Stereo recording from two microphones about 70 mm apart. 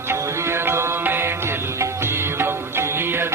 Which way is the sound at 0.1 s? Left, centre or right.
Right.